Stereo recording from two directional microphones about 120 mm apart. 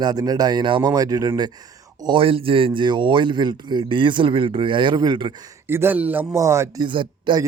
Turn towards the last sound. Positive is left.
turn(degrees=-45)  # may be behind; listen again after turning